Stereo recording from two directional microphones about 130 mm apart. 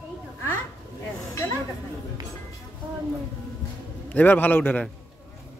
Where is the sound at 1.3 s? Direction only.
20° left (ahead or behind).